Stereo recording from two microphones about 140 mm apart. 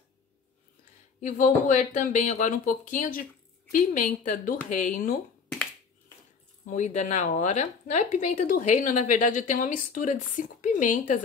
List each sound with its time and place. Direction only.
1.2 s speech: 65° left (ahead or behind)
6.6 s speech: 60° left (ahead or behind)